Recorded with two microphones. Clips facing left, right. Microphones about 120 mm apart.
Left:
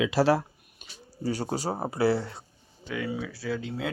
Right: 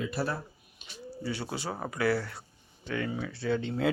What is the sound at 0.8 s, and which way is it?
Bird, 45° left (ahead or behind).